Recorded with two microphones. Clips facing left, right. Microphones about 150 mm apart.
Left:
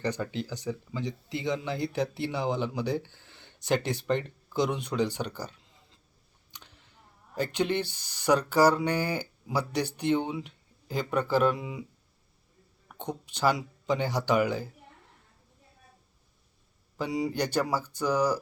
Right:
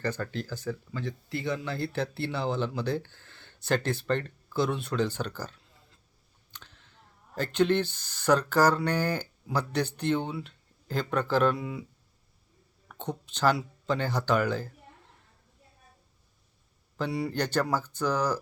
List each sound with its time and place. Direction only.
0.0 s speech: 15° left (ahead or behind)
6.5 s clicking: 15° left (ahead or behind)
7.3 s speech: 10° left (ahead or behind)
12.9 s speech: 10° left (ahead or behind)
17.0 s speech: 10° left (ahead or behind)